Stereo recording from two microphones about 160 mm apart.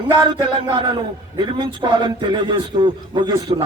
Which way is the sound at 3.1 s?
25° right (ahead or behind).